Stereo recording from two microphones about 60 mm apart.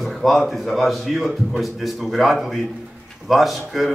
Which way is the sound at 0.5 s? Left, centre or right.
Centre.